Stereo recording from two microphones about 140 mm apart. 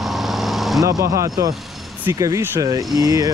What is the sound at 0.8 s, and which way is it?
Speech, 25° right (ahead or behind).